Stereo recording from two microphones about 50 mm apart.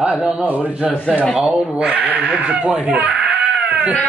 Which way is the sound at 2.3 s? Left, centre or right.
Right.